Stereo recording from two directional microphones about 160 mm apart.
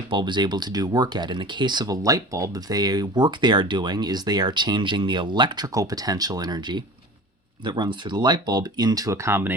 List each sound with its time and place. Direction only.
0.1 s speech: 30° right (ahead or behind); by 9.6 s 15° right (ahead or behind)